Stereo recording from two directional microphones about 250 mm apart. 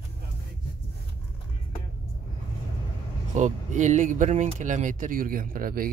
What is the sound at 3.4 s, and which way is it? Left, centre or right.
Speech, right.